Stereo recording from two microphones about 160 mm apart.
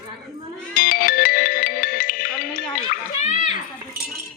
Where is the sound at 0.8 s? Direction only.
60° left (ahead or behind).